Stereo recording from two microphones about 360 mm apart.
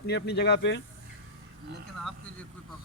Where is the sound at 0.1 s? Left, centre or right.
Left.